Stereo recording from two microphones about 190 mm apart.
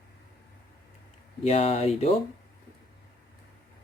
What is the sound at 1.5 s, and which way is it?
Speech, 30° left (ahead or behind).